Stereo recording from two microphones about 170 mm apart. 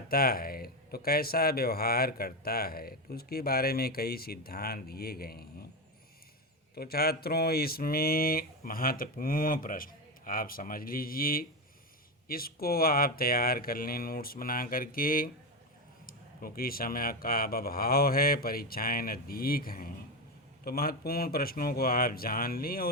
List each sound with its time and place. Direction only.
0.1 s speech: 60° left (ahead or behind)
6.7 s speech: 65° left (ahead or behind)